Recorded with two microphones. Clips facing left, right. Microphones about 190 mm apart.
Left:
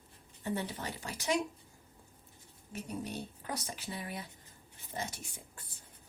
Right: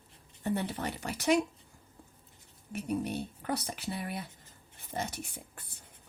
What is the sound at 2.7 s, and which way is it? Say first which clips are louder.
Speech: right 6 dB; 65° right (ahead or behind).